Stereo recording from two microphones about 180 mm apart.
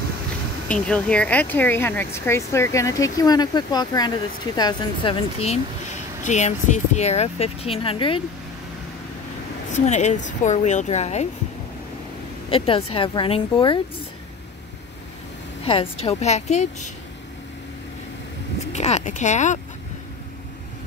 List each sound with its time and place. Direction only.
0.7 s speech: 5° left (ahead or behind); by 5.1 s 25° left (ahead or behind)
6.2 s speech: 40° left (ahead or behind)
9.7 s speech: 40° left (ahead or behind)
12.4 s speech: 30° left (ahead or behind)
15.6 s speech: 30° left (ahead or behind)
18.7 s speech: 35° left (ahead or behind)